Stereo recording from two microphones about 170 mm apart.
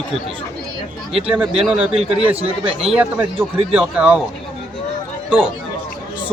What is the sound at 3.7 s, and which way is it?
Speech, 5° right (ahead or behind).